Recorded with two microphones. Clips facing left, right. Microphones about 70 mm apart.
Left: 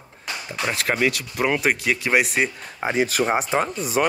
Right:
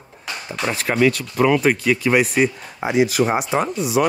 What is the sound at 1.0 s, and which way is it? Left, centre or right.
Speech, centre.